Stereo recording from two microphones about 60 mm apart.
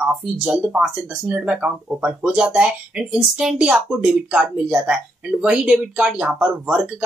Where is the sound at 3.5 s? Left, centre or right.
Centre.